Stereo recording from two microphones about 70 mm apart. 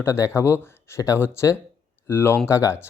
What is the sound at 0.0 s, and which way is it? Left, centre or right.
Speech, left.